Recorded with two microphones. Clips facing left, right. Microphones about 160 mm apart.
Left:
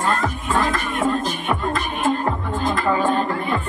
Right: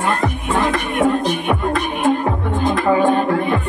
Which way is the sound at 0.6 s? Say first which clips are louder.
Right 5 dB; 65° right (ahead or behind).